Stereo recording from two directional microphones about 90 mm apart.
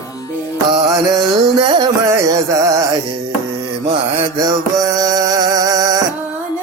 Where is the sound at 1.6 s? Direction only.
55° right (ahead or behind).